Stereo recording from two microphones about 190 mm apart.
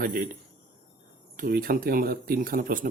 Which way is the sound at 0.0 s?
45° right (ahead or behind).